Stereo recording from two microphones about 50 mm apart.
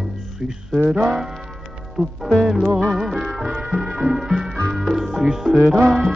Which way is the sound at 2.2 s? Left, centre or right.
Centre.